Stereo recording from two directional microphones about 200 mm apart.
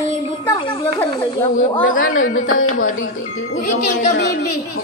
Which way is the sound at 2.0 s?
85° left.